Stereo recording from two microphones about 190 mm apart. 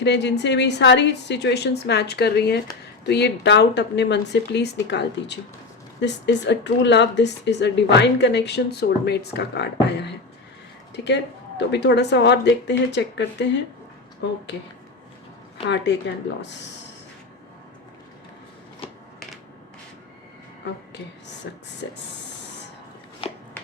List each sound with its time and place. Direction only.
0.0 s a woman's voice: 65° left (ahead or behind)
15.6 s speech: 65° left (ahead or behind)
21.5 s speech: 70° left (ahead or behind)
23.2 s a sound: 30° left (ahead or behind)